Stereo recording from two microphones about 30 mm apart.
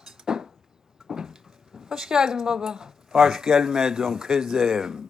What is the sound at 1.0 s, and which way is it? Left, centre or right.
Speech, centre.